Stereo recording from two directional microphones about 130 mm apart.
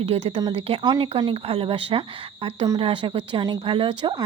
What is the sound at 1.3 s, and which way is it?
Speech, 45° right (ahead or behind).